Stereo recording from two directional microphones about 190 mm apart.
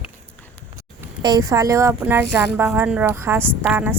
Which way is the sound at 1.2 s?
20° right (ahead or behind).